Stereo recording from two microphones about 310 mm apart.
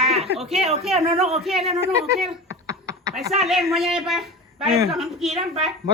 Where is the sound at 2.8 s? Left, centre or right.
Centre.